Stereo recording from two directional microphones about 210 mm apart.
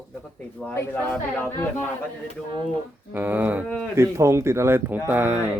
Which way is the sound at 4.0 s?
15° right (ahead or behind).